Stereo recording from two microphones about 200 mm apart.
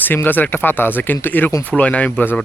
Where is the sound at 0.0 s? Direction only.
10° left (ahead or behind).